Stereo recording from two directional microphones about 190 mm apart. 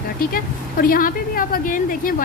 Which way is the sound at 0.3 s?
50° left (ahead or behind).